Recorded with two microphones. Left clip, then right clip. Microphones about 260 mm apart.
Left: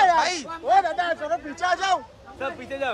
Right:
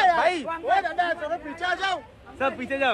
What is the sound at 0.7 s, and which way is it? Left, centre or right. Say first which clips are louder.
A man's voice: left 3 dB; left.